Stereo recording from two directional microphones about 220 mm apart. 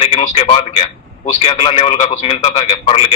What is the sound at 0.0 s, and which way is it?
A man's voice, 30° left (ahead or behind).